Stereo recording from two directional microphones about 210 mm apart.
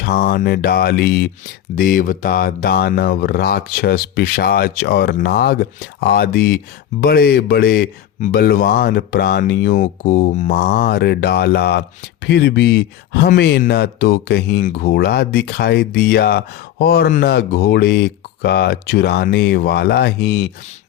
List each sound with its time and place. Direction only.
0.0 s speech: 45° left (ahead or behind)